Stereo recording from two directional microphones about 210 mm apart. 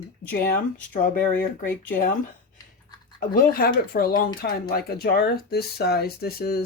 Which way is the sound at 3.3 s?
45° left (ahead or behind).